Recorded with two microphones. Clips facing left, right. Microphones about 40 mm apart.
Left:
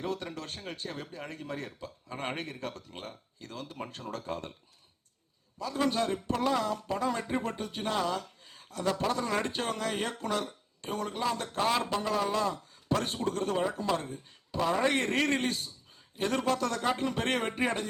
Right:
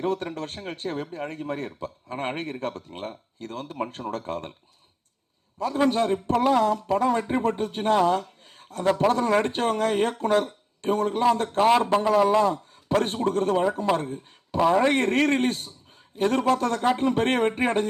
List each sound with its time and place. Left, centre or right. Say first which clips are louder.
0.0 s speech: right 8 dB; right
5.5 s speech: right 7 dB; right